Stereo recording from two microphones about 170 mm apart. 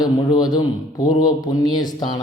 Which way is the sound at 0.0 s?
25° left (ahead or behind).